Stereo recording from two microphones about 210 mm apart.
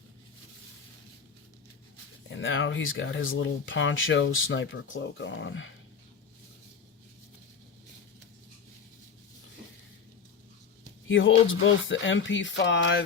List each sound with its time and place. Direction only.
2.4 s speech: 65° left (ahead or behind)
11.1 s speech: 65° left (ahead or behind)